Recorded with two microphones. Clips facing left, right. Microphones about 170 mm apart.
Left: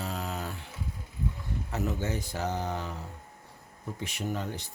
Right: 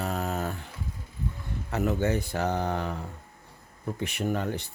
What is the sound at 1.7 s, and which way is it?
Speech, 65° right (ahead or behind).